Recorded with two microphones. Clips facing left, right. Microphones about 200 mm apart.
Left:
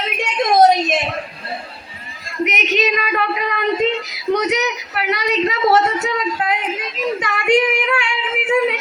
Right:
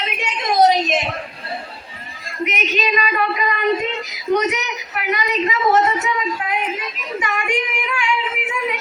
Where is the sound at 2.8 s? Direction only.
55° left (ahead or behind).